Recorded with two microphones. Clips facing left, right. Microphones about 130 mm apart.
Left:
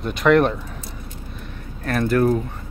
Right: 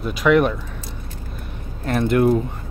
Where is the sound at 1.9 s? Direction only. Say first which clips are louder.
Right 1 dB; 20° right (ahead or behind).